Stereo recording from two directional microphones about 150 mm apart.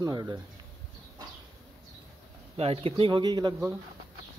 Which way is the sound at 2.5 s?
40° right (ahead or behind).